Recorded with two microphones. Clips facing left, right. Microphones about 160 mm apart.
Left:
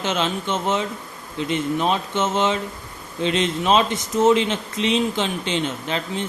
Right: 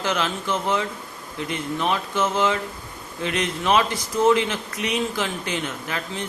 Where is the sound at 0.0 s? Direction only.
25° left (ahead or behind).